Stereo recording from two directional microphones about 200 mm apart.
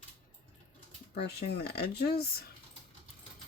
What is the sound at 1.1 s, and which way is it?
Speech, 55° left (ahead or behind).